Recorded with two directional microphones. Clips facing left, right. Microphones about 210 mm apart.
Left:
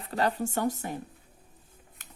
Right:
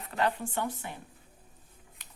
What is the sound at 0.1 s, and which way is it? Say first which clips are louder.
Speech: left 3 dB; 40° left (ahead or behind).